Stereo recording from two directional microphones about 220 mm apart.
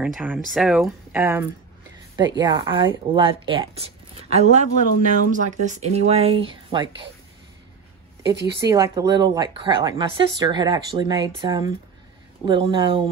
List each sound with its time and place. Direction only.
0.0 s speech: 5° right (ahead or behind)
8.5 s speech: 15° right (ahead or behind)